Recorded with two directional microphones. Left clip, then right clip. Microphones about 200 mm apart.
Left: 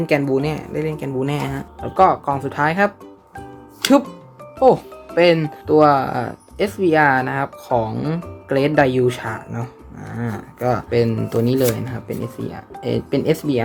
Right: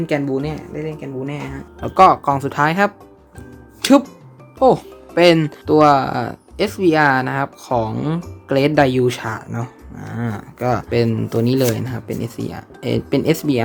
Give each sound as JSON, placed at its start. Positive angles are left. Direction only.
{"t": 0.0, "sound": "speech", "side_deg": 0}
{"t": 0.8, "sound": "speech", "side_deg": 15}
{"t": 1.8, "sound": "speech", "side_deg": -20}
{"t": 4.6, "sound": "speech", "side_deg": -10}